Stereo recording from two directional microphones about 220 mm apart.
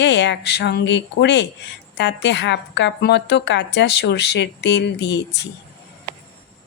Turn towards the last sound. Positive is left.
turn(degrees=55)  # may be behind; listen again after turning